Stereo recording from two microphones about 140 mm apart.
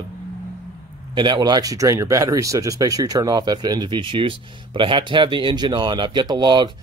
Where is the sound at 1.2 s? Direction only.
30° right (ahead or behind).